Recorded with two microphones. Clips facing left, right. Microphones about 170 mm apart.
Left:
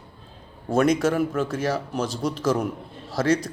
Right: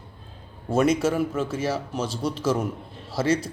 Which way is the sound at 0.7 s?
5° right (ahead or behind).